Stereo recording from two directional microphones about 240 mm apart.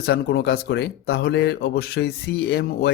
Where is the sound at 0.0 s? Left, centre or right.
Left.